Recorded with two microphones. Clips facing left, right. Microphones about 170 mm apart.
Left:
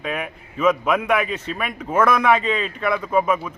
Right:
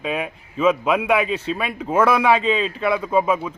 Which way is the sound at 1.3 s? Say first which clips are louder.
Right 4 dB; 30° right (ahead or behind).